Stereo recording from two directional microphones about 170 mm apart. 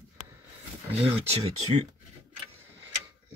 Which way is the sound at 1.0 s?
35° right (ahead or behind).